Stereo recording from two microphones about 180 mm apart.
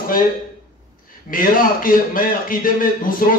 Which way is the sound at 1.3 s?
50° left (ahead or behind).